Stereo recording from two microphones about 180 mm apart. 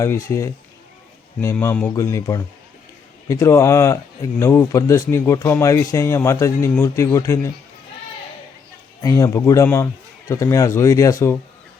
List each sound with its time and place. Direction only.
0.0 s speech: 15° left (ahead or behind)
9.0 s speech: 15° left (ahead or behind)